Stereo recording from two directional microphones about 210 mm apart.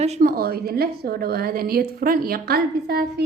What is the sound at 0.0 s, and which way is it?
A woman's voice, 35° right (ahead or behind).